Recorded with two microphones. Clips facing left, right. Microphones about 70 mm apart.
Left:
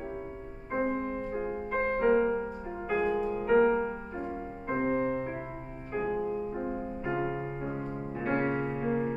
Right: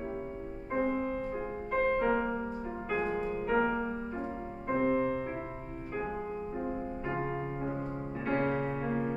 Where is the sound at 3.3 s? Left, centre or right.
Centre.